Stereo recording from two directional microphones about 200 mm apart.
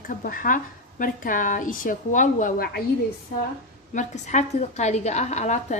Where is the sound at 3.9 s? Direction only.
35° left (ahead or behind).